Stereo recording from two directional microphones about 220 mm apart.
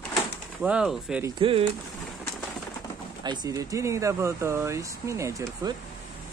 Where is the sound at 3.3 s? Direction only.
15° right (ahead or behind).